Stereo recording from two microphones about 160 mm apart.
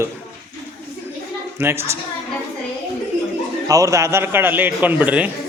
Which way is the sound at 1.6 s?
15° right (ahead or behind).